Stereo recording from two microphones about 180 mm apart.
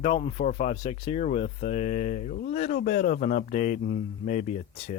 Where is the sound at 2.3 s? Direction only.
55° left (ahead or behind).